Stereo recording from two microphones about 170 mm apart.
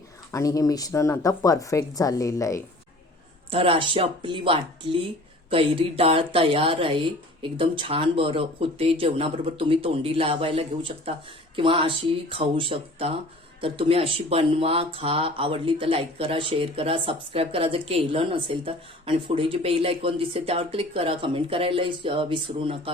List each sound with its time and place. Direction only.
0.3 s speech: 20° left (ahead or behind)
3.5 s speech: 30° right (ahead or behind)